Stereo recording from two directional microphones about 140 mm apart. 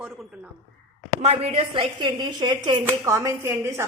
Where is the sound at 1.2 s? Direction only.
50° right (ahead or behind).